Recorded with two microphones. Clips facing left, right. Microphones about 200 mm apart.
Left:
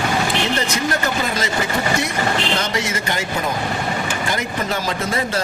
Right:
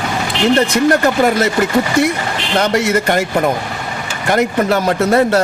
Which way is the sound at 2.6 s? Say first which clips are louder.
Right 9 dB; 60° right (ahead or behind).